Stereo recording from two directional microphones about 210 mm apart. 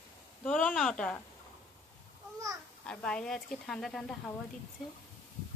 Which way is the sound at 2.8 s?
5° left (ahead or behind).